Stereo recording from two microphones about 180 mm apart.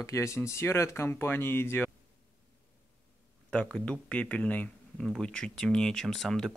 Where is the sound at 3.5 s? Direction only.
5° left (ahead or behind).